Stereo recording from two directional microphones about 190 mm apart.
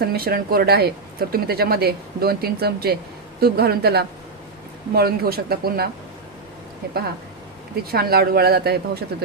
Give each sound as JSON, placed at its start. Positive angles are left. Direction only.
{"t": 0.1, "sound": "speech", "side_deg": -55}